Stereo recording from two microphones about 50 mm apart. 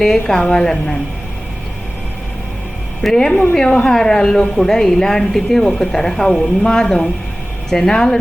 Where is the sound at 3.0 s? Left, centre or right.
Centre.